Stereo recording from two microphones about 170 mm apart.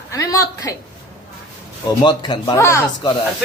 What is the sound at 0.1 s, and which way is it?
Speech, 20° left (ahead or behind).